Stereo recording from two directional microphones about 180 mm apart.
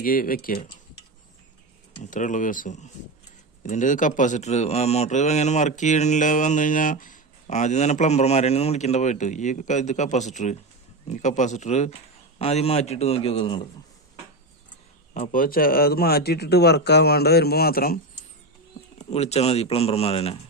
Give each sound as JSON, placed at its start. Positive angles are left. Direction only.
{"t": 0.0, "sound": "speech", "side_deg": 50}
{"t": 2.0, "sound": "speech", "side_deg": 45}
{"t": 15.1, "sound": "speech", "side_deg": 50}
{"t": 18.9, "sound": "speech", "side_deg": 35}